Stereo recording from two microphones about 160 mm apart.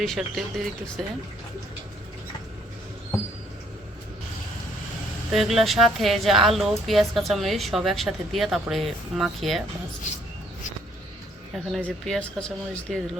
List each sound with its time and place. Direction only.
0.0 s speech: centre (ahead or behind)
5.3 s speech: centre (ahead or behind)
11.5 s speech: centre (ahead or behind)